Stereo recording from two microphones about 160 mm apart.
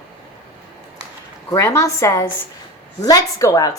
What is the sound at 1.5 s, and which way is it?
Speech, 20° left (ahead or behind).